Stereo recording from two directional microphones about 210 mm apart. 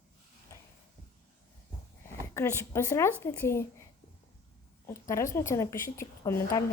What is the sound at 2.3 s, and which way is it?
Speech, 10° left (ahead or behind).